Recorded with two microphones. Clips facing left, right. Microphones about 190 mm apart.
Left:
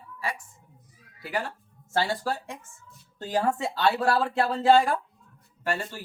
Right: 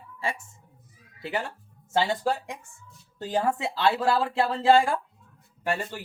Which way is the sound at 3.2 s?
5° right (ahead or behind).